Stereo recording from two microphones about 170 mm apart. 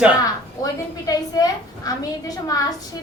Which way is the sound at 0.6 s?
20° left (ahead or behind).